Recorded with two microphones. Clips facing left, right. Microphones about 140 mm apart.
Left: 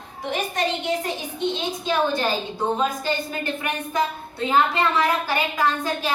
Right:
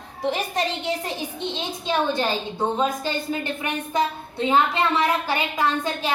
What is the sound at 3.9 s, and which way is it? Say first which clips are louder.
A woman's voice: right 2 dB; 25° right (ahead or behind).